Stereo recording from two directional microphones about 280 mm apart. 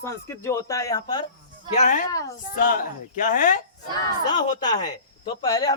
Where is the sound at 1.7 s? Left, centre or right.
Left.